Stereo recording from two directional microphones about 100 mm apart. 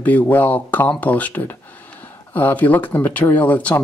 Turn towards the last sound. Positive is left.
turn(degrees=15)  # may be behind; listen again after turning